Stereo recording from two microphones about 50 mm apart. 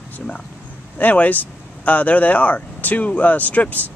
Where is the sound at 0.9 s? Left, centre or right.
Left.